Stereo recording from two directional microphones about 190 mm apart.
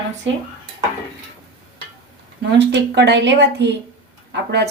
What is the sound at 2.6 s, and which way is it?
A woman's voice, 65° right (ahead or behind).